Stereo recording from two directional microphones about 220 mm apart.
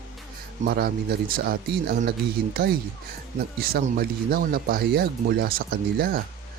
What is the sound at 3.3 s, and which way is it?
Speech, 40° right (ahead or behind).